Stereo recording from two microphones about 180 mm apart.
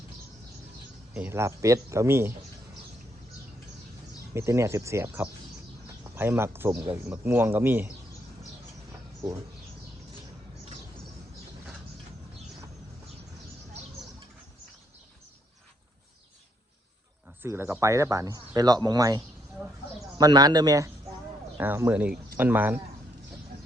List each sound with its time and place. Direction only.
1.1 s speech: 10° right (ahead or behind)
4.4 s speech: 15° right (ahead or behind)
17.4 s speech: 15° right (ahead or behind)
19.6 s speech: 10° right (ahead or behind)
20.1 s a man's voice: 20° right (ahead or behind)